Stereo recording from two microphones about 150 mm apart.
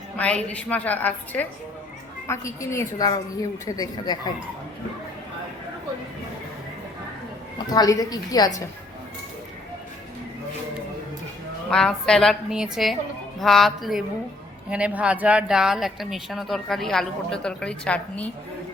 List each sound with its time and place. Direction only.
0.2 s a woman's voice: 10° left (ahead or behind); by 4.2 s 25° left (ahead or behind)
7.7 s a woman's voice: 25° left (ahead or behind)
11.7 s speech: 5° left (ahead or behind)